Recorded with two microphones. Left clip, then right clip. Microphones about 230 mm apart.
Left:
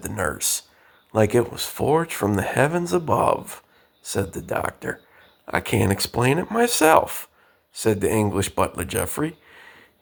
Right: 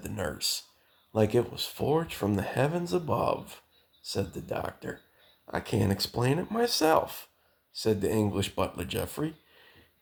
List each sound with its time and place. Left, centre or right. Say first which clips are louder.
0.0 s speech: left 7 dB; left